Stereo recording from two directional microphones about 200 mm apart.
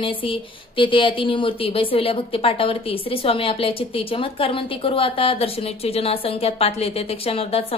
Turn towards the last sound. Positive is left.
turn(degrees=30)  # may be behind; listen again after turning